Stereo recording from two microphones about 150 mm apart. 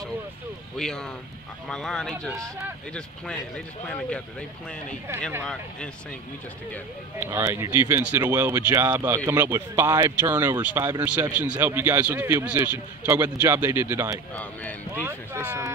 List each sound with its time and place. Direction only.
0.7 s speech: 5° left (ahead or behind)
7.2 s speech: 15° right (ahead or behind)
14.3 s speech: 10° left (ahead or behind)
15.0 s speech: 15° right (ahead or behind)